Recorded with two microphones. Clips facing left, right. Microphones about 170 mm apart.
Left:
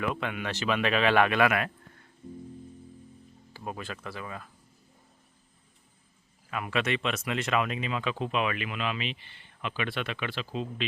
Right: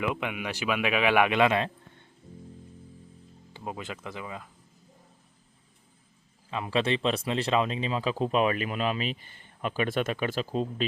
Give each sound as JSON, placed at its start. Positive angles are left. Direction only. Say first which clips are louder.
{"t": 0.0, "sound": "speech", "louder": "right 1 dB", "side_deg": -15}
{"t": 3.5, "sound": "speech", "louder": "right 1 dB", "side_deg": -20}
{"t": 6.5, "sound": "speech", "louder": "right 3 dB", "side_deg": -25}